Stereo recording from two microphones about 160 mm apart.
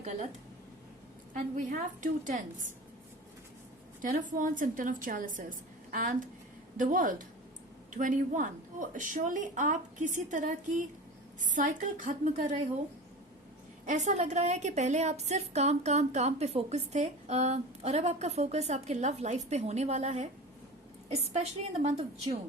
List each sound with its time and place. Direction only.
1.3 s a woman's voice: 55° right (ahead or behind)
4.0 s a woman's voice: 55° right (ahead or behind)
13.8 s a woman's voice: 50° right (ahead or behind)